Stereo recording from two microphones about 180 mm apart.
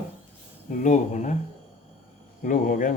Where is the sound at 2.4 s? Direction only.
45° left (ahead or behind).